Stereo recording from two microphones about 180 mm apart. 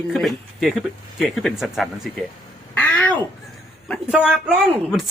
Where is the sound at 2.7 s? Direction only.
10° left (ahead or behind).